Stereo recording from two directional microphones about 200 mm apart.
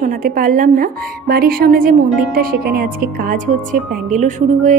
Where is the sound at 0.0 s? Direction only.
45° right (ahead or behind).